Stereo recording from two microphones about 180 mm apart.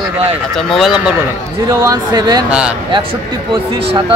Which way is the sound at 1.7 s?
20° right (ahead or behind).